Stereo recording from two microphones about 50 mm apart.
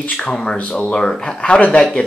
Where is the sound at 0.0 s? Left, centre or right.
Left; by 1.4 s centre.